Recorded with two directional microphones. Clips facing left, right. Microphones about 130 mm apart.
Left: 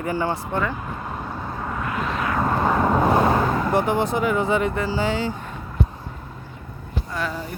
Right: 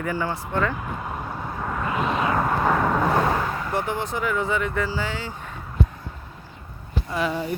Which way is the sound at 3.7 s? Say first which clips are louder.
Left 4 dB; 15° left (ahead or behind).